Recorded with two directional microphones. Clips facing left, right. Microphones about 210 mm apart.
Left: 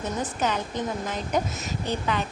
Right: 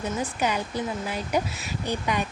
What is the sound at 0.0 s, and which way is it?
A woman's voice, 10° right (ahead or behind).